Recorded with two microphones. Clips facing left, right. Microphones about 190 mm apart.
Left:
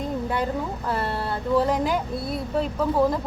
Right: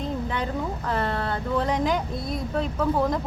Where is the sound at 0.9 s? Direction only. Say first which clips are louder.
Right 1 dB; 5° left (ahead or behind).